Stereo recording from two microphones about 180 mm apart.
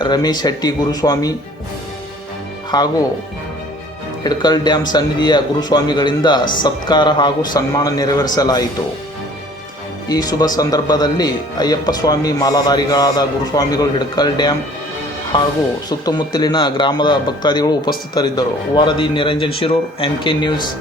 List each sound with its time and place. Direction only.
0.0 s a man's voice: 20° left (ahead or behind)
2.7 s a man's voice: 25° left (ahead or behind)
4.2 s a man's voice: 25° left (ahead or behind)
10.1 s a man's voice: 20° left (ahead or behind)